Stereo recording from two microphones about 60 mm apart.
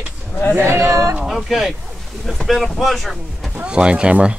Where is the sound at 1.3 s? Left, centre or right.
Centre.